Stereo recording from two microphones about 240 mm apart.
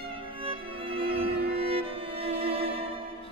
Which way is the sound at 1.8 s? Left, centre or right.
Right.